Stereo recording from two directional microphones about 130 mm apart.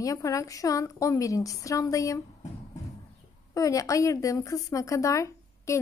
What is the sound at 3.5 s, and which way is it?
A woman's voice, 25° left (ahead or behind).